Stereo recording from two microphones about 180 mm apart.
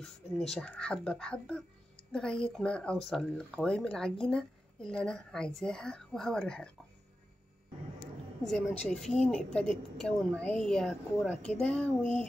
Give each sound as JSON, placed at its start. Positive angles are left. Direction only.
{"t": 0.0, "sound": "speech", "side_deg": 0}
{"t": 8.5, "sound": "speech", "side_deg": 0}
{"t": 12.0, "sound": "a sound", "side_deg": 40}